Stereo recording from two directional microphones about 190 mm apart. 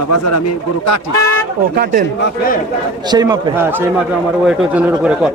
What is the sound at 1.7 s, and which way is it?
Speech, 55° right (ahead or behind).